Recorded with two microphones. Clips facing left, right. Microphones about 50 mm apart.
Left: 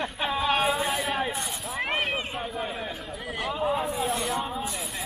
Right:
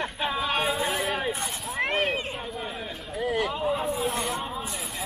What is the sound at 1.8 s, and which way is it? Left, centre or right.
Run, centre.